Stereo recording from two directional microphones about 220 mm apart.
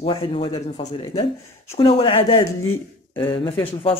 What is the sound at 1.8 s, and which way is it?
Speech, 25° left (ahead or behind).